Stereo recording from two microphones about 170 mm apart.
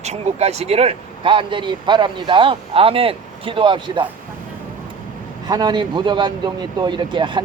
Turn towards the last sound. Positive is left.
turn(degrees=-25)  # may be behind; listen again after turning